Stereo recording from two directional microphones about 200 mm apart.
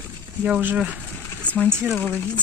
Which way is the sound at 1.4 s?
5° left (ahead or behind).